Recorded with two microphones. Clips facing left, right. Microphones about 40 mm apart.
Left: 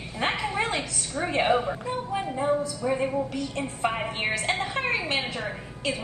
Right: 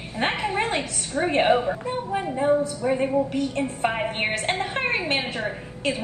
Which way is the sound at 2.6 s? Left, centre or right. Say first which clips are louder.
Right 3 dB; right.